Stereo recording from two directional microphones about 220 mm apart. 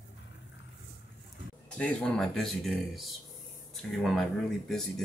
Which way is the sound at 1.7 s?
5° left (ahead or behind).